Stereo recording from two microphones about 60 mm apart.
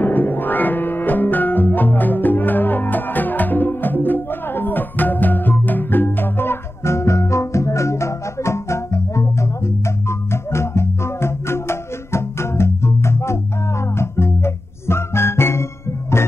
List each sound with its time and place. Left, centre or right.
0.0 s music: left